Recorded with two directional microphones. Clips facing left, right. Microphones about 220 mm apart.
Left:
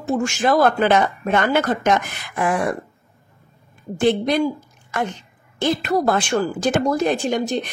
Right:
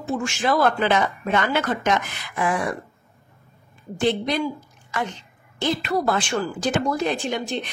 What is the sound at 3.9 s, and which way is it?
A woman's voice, 50° left (ahead or behind).